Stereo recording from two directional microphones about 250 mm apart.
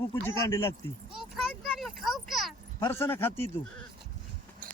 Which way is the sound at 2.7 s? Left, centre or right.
Centre.